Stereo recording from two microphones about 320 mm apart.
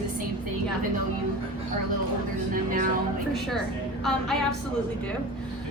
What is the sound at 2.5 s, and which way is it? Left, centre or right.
Speech, right.